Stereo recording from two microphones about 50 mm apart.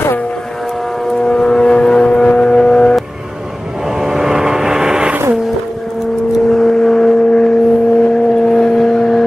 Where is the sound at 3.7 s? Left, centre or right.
Centre.